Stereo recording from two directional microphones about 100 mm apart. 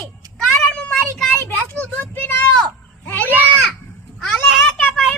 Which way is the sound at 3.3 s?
20° right (ahead or behind).